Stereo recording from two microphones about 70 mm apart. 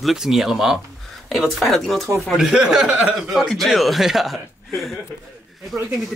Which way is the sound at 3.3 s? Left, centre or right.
Centre.